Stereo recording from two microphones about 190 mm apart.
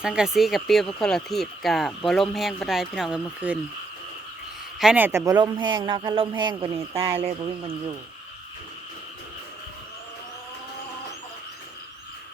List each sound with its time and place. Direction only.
0.0 s speech: 5° right (ahead or behind)
4.8 s speech: 5° right (ahead or behind); by 7.3 s 30° right (ahead or behind)